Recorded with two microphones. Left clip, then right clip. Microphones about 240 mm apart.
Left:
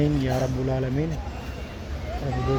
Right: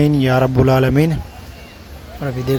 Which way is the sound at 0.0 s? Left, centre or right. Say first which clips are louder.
Right 10 dB; right.